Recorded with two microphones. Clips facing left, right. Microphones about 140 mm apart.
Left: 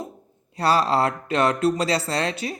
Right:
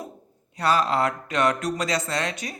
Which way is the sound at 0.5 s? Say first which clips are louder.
Left 2 dB; 30° left (ahead or behind).